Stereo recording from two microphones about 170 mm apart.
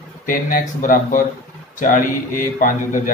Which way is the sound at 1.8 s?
50° left (ahead or behind).